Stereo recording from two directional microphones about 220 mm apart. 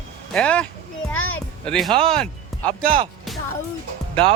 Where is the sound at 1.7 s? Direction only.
5° left (ahead or behind).